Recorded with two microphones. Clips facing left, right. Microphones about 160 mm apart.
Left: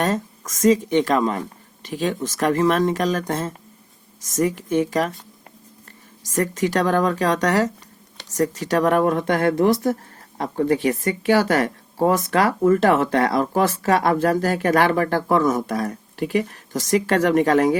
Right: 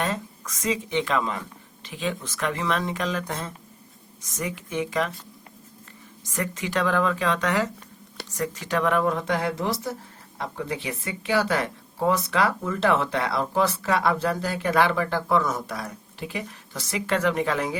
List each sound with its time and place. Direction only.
0.0 s speech: 45° left (ahead or behind)
6.4 s speech: 40° left (ahead or behind)